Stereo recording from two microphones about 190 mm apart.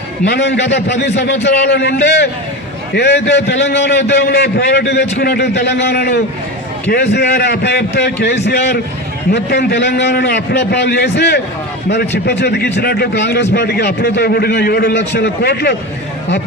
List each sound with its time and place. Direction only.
0.3 s a man's voice: 65° left (ahead or behind)